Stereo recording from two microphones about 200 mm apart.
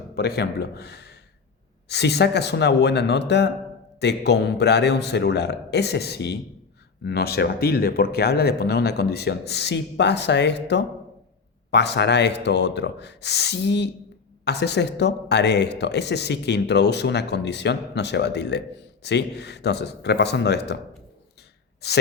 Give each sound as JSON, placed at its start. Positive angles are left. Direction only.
{"t": 0.1, "sound": "speech", "side_deg": 55}
{"t": 21.8, "sound": "speech", "side_deg": 55}